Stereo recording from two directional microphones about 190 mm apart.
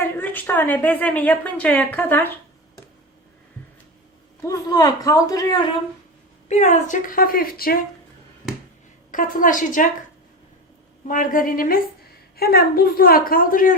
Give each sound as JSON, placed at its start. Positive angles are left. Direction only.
{"t": 0.0, "sound": "a woman's voice", "side_deg": 10}
{"t": 4.4, "sound": "a man's voice", "side_deg": 20}
{"t": 6.5, "sound": "a woman's voice", "side_deg": 40}
{"t": 9.1, "sound": "a woman's voice", "side_deg": 45}
{"t": 11.1, "sound": "a woman's voice", "side_deg": 45}